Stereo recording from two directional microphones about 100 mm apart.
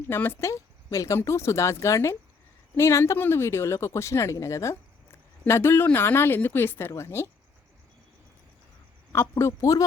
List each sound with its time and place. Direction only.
0.1 s speech: 20° left (ahead or behind)
9.3 s speech: 30° left (ahead or behind)